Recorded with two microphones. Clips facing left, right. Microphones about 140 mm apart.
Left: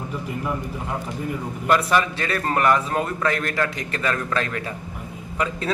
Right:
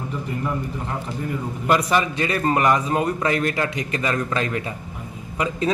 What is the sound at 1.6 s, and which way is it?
A man's voice, 5° right (ahead or behind).